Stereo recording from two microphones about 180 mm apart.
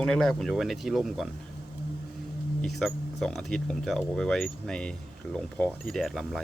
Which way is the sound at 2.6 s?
Centre (ahead or behind).